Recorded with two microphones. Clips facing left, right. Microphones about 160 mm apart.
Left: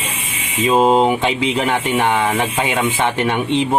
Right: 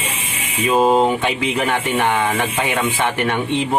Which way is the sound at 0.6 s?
20° left (ahead or behind).